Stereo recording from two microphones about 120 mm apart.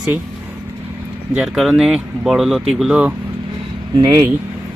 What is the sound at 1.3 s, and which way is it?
Speech, 5° right (ahead or behind).